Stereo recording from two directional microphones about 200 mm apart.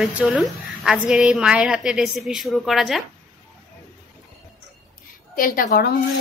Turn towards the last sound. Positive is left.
turn(degrees=50)  # may be behind; listen again after turning